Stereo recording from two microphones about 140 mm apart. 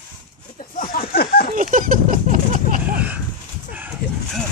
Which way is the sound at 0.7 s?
85° left.